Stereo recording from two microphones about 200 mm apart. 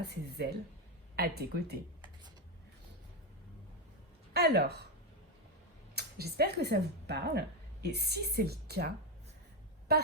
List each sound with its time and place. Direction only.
0.1 s speech: 55° right (ahead or behind)
4.4 s speech: 55° right (ahead or behind)
5.9 s speech: 55° right (ahead or behind)